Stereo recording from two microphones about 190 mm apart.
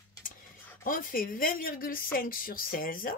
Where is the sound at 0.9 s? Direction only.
45° left (ahead or behind).